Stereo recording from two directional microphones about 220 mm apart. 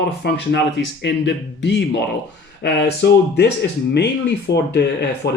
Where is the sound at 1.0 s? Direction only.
55° left (ahead or behind).